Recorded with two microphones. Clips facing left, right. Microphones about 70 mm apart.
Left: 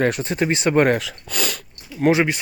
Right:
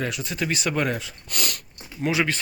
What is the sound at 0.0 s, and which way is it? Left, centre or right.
Speech, left.